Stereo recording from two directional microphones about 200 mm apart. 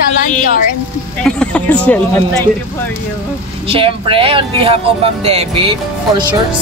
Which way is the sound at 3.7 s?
25° right (ahead or behind).